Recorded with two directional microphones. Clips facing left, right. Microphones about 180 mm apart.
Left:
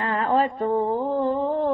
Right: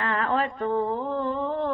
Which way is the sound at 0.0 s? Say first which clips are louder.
Left 4 dB; 30° left (ahead or behind).